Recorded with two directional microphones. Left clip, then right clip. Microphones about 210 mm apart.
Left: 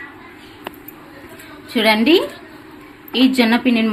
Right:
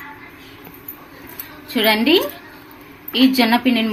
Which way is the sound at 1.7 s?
10° left (ahead or behind).